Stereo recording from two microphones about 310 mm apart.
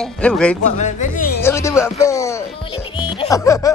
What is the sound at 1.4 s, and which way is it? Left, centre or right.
Music, centre.